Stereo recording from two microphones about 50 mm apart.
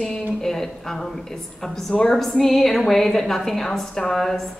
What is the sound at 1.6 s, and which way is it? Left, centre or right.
A woman's voice, centre.